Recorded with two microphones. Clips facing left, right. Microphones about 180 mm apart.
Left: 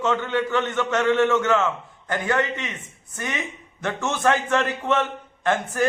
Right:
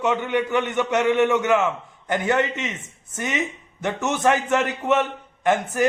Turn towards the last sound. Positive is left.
turn(degrees=-15)  # may be behind; listen again after turning